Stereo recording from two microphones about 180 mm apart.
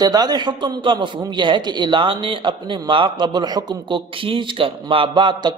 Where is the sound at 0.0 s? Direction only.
20° right (ahead or behind).